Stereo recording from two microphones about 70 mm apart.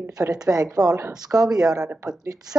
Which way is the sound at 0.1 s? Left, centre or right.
Right.